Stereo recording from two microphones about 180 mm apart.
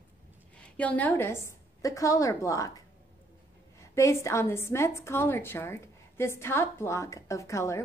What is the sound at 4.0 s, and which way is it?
Speech, 15° left (ahead or behind).